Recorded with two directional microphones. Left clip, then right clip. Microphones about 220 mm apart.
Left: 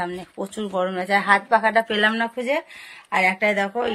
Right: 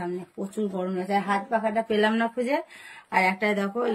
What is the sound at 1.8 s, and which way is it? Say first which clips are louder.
Speech: left 3 dB; 5° right (ahead or behind).